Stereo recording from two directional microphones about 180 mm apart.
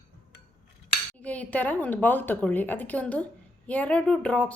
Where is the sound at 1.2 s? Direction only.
10° left (ahead or behind).